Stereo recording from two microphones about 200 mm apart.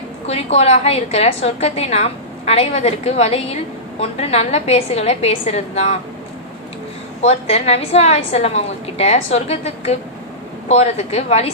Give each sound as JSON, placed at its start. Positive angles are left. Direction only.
{"t": 0.3, "sound": "a woman's voice", "side_deg": 30}
{"t": 7.2, "sound": "a woman's voice", "side_deg": 30}